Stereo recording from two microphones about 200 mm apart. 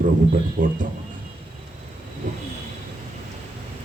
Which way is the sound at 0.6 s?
45° right (ahead or behind).